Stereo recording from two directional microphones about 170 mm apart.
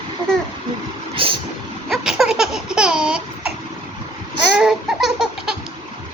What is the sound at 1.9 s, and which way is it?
Laughter, centre (ahead or behind).